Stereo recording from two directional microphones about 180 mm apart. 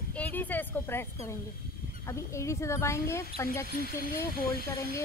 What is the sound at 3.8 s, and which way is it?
Speech, 55° left (ahead or behind).